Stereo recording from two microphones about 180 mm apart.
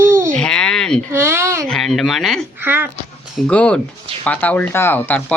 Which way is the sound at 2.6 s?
10° right (ahead or behind).